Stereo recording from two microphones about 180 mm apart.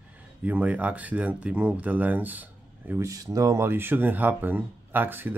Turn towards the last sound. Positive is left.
turn(degrees=-10)  # may be behind; listen again after turning